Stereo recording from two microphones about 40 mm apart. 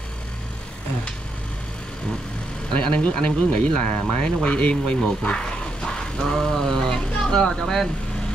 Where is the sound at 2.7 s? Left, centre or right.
Left.